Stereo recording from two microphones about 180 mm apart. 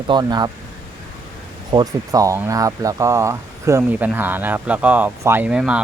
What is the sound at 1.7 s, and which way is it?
Speech, 20° right (ahead or behind).